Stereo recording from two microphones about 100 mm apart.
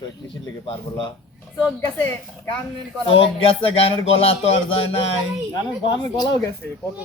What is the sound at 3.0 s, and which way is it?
Speech, 70° left (ahead or behind).